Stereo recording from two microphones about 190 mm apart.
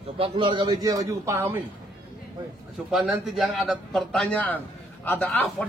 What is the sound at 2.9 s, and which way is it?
A man's voice, centre (ahead or behind).